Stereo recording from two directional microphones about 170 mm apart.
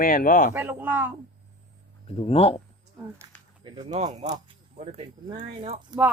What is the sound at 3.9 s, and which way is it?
Speech, 45° right (ahead or behind).